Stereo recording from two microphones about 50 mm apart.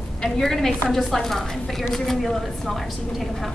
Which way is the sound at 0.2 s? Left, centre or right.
Centre.